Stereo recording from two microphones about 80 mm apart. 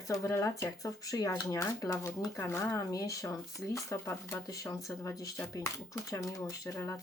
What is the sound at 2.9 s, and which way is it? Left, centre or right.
Speech, left.